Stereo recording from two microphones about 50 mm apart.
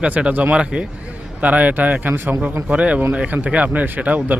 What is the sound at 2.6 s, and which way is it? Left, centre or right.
Speech, right.